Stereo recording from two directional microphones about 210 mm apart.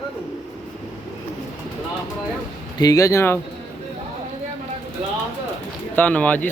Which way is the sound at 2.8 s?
15° left (ahead or behind).